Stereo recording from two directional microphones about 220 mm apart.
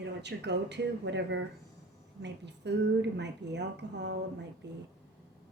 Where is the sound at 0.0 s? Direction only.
50° right (ahead or behind).